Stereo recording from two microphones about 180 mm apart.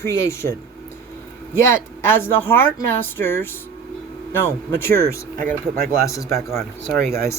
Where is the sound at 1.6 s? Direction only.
15° left (ahead or behind).